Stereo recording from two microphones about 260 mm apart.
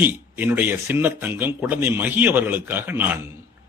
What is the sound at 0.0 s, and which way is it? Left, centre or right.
A man's voice, centre.